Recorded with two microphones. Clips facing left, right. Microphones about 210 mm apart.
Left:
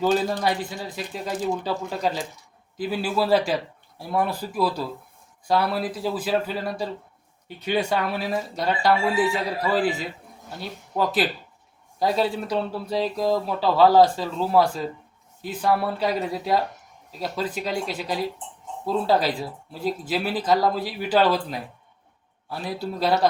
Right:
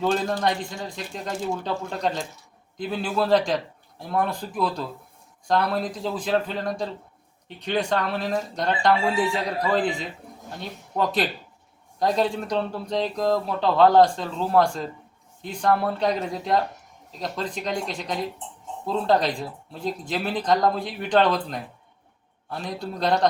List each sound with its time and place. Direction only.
0.0 s speech: 5° left (ahead or behind)